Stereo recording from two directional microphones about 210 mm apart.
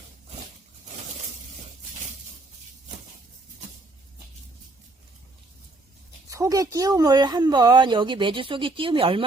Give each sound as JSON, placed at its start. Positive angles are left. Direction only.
{"t": 6.3, "sound": "speech", "side_deg": -15}